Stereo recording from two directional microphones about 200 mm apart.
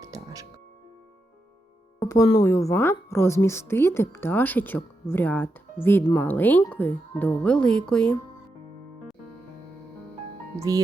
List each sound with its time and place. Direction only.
0.0 s music: 15° right (ahead or behind)
2.0 s music: 15° left (ahead or behind)
2.4 s speech: 15° left (ahead or behind)